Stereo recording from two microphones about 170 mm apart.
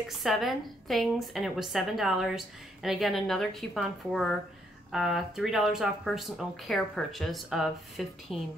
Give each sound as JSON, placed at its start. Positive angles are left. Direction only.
{"t": 0.1, "sound": "a woman's voice", "side_deg": 0}